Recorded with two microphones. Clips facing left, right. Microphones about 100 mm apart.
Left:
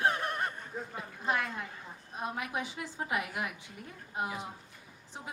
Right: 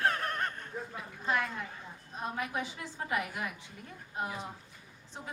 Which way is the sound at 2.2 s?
15° left (ahead or behind).